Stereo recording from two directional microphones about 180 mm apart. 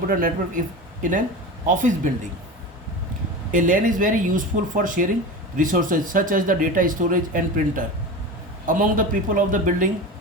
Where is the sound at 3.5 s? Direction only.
45° right (ahead or behind).